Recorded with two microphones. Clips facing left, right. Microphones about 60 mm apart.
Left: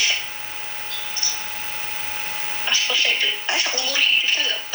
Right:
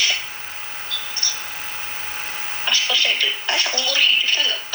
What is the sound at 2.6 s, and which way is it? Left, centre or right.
Speech, right.